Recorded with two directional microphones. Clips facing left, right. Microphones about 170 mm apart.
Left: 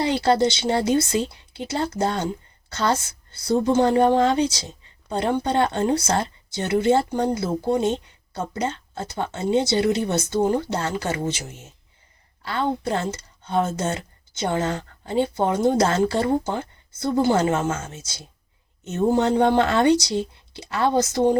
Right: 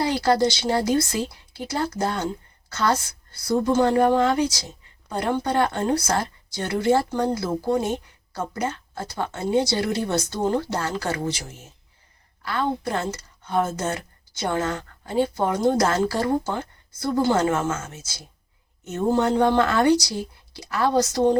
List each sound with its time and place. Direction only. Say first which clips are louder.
0.0 s speech: left 1 dB; 25° left (ahead or behind)
12.5 s speech: left 1 dB; 25° left (ahead or behind)